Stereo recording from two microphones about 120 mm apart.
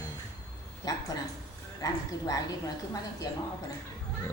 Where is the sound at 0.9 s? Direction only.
30° left (ahead or behind).